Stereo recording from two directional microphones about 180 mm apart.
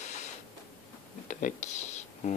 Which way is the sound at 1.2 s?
40° left (ahead or behind).